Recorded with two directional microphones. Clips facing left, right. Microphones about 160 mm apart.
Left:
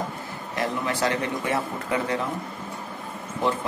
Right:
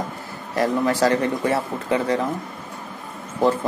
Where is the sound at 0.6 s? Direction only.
40° right (ahead or behind).